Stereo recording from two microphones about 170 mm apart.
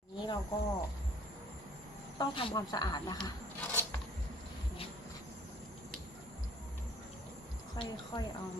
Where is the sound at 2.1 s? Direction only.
30° left (ahead or behind).